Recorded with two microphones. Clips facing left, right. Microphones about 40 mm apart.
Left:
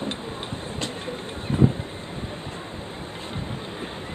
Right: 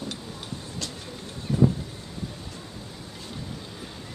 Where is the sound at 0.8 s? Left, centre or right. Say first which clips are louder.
Left 6 dB; left.